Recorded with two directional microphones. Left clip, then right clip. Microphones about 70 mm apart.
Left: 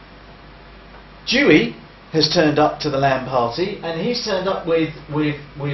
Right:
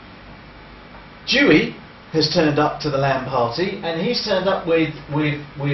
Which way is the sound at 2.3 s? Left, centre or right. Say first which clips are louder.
Left 3 dB; centre.